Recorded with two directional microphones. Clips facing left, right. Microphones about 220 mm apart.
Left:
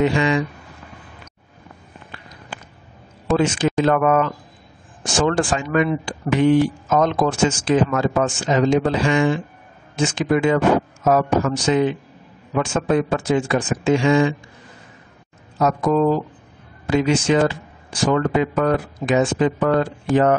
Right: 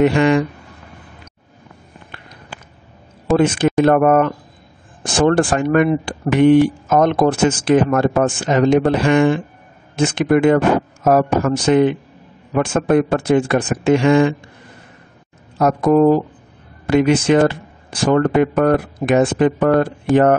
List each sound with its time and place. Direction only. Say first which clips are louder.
0.0 s speech: right 5 dB; 55° right (ahead or behind)
3.3 s speech: right 4 dB; 55° right (ahead or behind)
15.6 s speech: right 5 dB; 55° right (ahead or behind)